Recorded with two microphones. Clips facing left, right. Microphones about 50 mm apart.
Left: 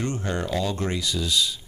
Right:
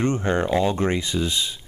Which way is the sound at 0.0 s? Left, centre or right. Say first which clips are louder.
Right 6 dB; right.